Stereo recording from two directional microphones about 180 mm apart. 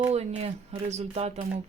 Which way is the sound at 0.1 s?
35° right (ahead or behind).